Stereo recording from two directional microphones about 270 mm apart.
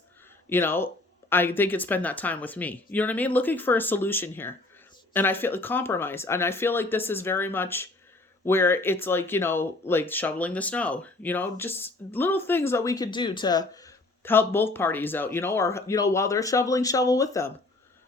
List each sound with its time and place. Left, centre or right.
0.5 s speech: centre